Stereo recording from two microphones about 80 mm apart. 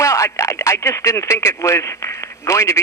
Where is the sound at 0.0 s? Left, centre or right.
Left.